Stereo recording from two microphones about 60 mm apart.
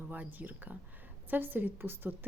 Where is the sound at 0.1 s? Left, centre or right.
Right.